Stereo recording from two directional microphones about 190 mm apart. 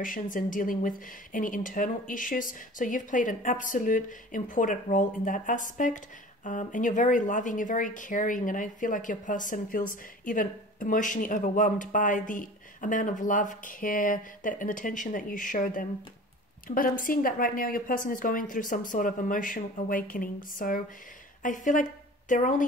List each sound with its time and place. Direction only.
0.0 s speech: 45° left (ahead or behind)